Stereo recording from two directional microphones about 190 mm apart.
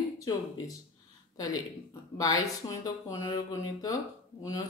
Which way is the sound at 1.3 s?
20° left (ahead or behind).